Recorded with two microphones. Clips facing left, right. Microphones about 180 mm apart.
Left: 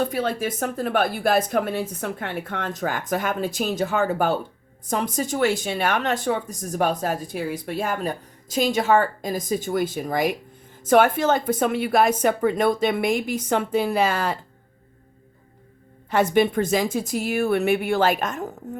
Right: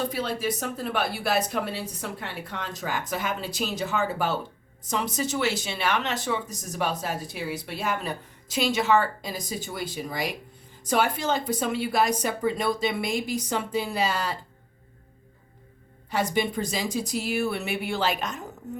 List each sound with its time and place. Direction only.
0.1 s speech: 50° left (ahead or behind)
16.0 s speech: 55° left (ahead or behind)